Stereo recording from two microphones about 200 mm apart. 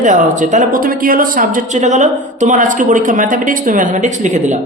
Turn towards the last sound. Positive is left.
turn(degrees=-35)  # may be behind; listen again after turning